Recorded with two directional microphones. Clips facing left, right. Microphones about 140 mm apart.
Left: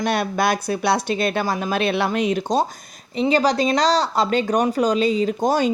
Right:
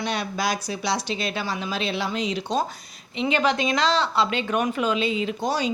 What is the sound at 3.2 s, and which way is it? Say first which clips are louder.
Speech: left 5 dB; 35° left (ahead or behind).